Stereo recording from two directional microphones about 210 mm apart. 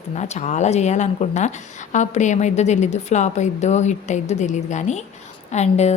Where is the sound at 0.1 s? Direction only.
35° left (ahead or behind).